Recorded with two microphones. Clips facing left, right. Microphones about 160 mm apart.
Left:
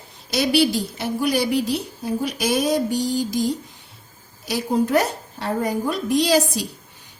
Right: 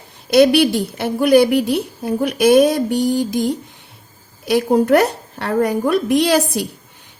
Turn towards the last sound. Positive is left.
turn(degrees=-60)  # may be behind; listen again after turning